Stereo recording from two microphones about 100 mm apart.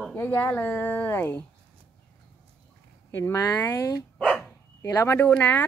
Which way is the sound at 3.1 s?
25° left (ahead or behind).